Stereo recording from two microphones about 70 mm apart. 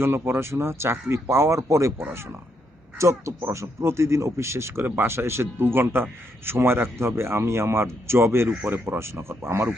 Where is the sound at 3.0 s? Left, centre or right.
Right.